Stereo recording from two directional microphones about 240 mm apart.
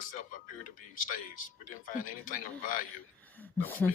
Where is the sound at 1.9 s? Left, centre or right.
Left.